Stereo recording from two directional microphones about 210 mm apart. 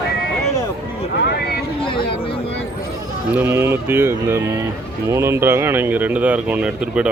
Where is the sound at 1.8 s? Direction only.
25° left (ahead or behind).